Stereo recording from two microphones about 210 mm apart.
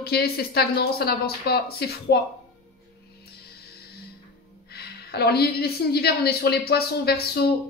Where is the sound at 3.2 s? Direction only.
50° left (ahead or behind).